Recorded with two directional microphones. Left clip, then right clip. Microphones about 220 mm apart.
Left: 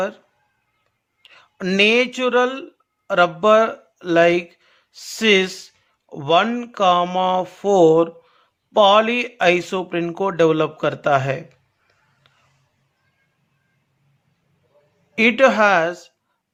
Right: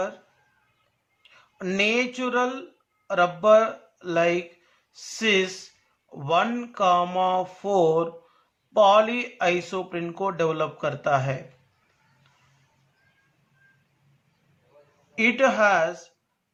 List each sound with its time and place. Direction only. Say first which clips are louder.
1.2 s speech: left 6 dB; 45° left (ahead or behind)
15.1 s speech: left 6 dB; 45° left (ahead or behind)